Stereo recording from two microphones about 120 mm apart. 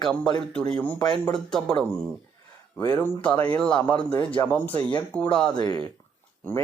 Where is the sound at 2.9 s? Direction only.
15° left (ahead or behind).